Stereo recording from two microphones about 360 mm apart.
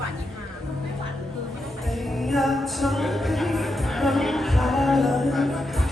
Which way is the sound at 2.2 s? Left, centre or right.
Centre.